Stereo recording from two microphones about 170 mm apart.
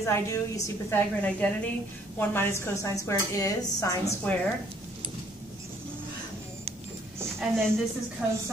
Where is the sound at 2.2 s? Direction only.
10° left (ahead or behind).